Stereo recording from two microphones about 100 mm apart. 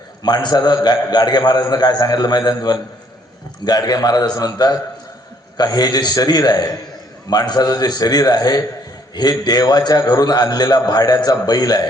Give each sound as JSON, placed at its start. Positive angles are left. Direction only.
{"t": 0.2, "sound": "a man's voice", "side_deg": 45}